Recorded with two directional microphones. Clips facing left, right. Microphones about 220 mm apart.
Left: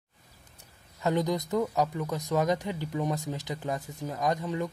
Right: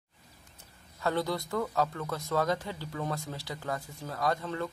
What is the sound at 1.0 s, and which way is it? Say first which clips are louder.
Speech: left 3 dB; 15° left (ahead or behind).